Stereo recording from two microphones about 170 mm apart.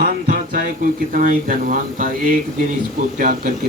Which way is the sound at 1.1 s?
50° right (ahead or behind).